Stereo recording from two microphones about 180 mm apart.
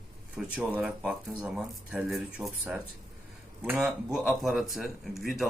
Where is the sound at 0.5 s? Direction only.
5° right (ahead or behind).